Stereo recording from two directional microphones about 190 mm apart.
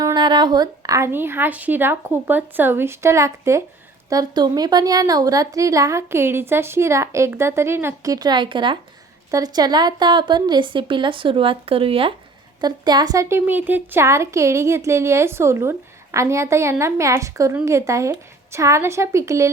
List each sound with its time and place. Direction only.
0.0 s a woman's voice: 20° right (ahead or behind)